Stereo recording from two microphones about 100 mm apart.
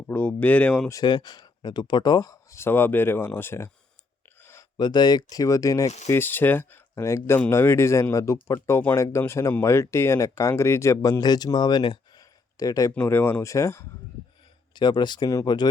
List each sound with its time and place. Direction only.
0.1 s speech: 15° left (ahead or behind)
1.0 s speech: 45° left (ahead or behind); by 3.7 s 25° left (ahead or behind)
4.4 s a sound: 25° left (ahead or behind)
4.8 s speech: 45° left (ahead or behind)
6.1 s speech: 20° left (ahead or behind)
8.5 s speech: 20° left (ahead or behind); by 12.2 s 50° left (ahead or behind)
12.5 s speech: 35° left (ahead or behind)
13.0 s speech: 20° left (ahead or behind)
14.8 s speech: 50° left (ahead or behind)